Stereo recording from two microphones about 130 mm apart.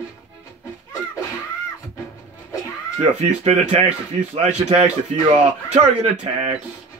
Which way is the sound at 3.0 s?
60° right (ahead or behind).